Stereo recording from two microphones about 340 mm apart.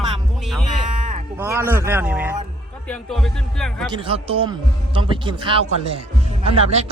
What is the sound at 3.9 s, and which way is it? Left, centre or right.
Speech, centre.